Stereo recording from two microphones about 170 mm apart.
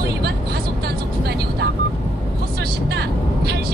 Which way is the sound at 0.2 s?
70° right (ahead or behind).